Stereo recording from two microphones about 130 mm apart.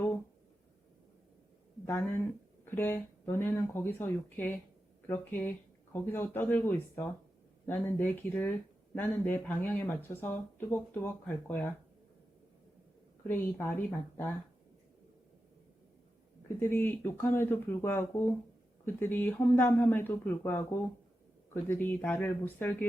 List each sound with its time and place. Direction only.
1.8 s speech: 15° left (ahead or behind)
13.2 s speech: 15° left (ahead or behind)
16.5 s speech: 15° left (ahead or behind)